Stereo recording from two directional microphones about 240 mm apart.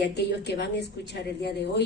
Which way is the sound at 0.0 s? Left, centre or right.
Left.